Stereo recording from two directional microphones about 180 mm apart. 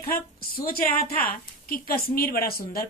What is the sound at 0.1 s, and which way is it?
A woman's voice, 55° left (ahead or behind).